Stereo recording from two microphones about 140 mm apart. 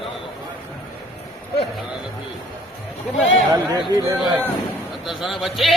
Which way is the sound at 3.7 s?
25° right (ahead or behind).